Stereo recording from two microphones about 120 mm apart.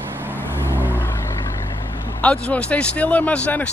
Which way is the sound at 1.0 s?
20° left (ahead or behind).